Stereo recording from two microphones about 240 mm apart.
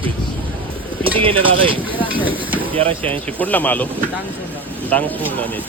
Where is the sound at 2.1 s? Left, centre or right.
Centre.